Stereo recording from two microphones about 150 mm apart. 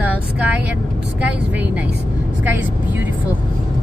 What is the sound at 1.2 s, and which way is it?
Speech, 10° right (ahead or behind).